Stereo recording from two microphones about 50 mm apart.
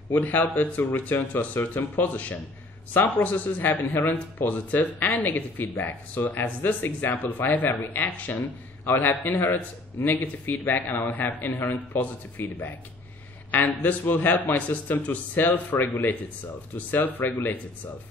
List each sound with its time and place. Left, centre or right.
0.1 s speech: left
8.4 s a man's voice: left
9.0 s speech: left